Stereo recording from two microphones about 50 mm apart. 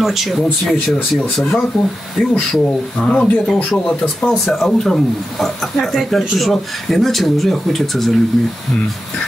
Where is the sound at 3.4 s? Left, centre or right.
Centre.